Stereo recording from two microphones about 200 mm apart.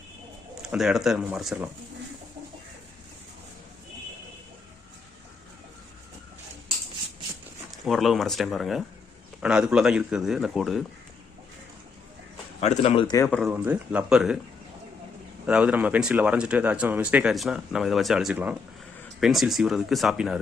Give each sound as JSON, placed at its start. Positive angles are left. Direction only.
{"t": 0.6, "sound": "speech", "side_deg": 0}
{"t": 7.9, "sound": "speech", "side_deg": 0}
{"t": 12.5, "sound": "speech", "side_deg": 30}
{"t": 13.1, "sound": "speech", "side_deg": 10}
{"t": 13.4, "sound": "speech", "side_deg": -10}
{"t": 15.4, "sound": "speech", "side_deg": -5}